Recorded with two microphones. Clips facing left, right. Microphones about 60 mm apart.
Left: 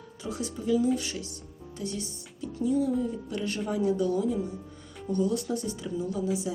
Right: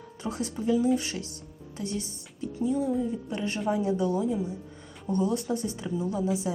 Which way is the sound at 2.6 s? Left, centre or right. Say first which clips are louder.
Left 1 dB; right.